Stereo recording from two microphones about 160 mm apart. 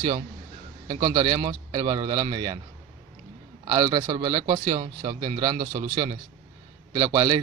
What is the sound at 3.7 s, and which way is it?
Speech, 40° right (ahead or behind).